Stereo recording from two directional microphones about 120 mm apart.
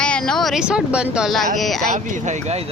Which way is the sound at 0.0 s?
5° left (ahead or behind).